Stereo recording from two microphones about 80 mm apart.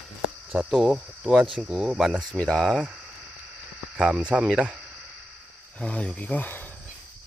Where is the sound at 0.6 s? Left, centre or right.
Centre.